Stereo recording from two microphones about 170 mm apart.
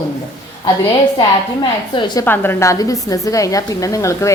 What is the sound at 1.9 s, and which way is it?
Speech, 25° left (ahead or behind).